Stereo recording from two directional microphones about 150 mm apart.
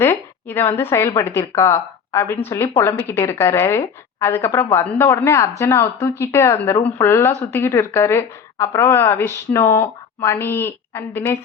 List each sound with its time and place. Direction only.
0.0 s a woman's voice: 15° left (ahead or behind)